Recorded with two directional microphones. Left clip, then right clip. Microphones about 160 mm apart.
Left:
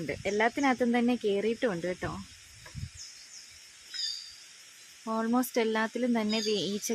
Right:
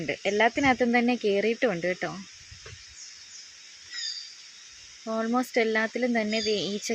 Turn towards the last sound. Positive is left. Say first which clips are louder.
# right 3 dB
turn(degrees=0)  # may be behind; listen again after turning